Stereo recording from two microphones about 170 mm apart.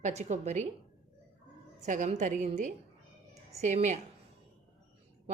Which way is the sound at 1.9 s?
45° right (ahead or behind).